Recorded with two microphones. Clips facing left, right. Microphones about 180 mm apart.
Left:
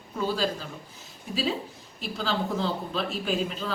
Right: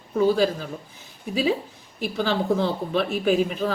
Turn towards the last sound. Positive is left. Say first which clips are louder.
# right 7 dB
turn(degrees=-55)  # may be behind; listen again after turning